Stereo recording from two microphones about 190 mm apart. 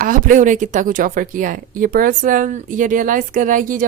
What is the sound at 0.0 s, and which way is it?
Speech, 45° right (ahead or behind).